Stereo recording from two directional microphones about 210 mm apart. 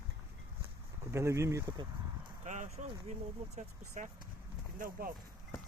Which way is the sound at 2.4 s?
35° right (ahead or behind).